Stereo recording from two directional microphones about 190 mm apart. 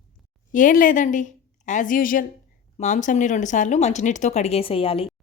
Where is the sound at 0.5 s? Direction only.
45° left (ahead or behind).